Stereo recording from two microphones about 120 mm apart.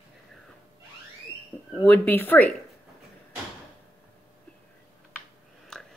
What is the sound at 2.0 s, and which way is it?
Speech, 15° left (ahead or behind).